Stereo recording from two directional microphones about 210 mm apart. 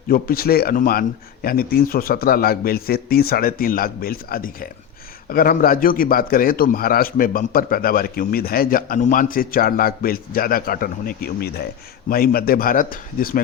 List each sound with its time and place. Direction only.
0.1 s a man's voice: 45° left (ahead or behind)